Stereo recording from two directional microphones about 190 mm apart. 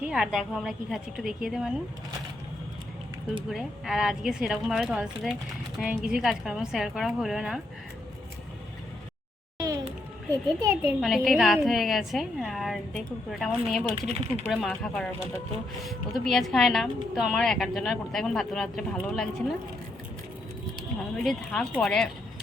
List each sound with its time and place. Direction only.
0.0 s speech: 5° right (ahead or behind)
3.5 s speech: centre (ahead or behind)
9.6 s music: 20° right (ahead or behind)
10.6 s a child's voice: 15° right (ahead or behind)
11.0 s speech: centre (ahead or behind)
21.2 s speech: 5° left (ahead or behind)